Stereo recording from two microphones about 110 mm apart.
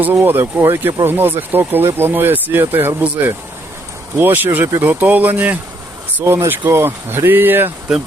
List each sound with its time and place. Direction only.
0.0 s speech: 20° right (ahead or behind)